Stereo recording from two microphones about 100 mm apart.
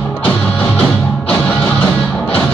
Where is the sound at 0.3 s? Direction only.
15° left (ahead or behind).